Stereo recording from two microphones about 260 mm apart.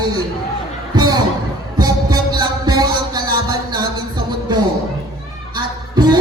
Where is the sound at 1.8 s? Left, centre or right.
Centre.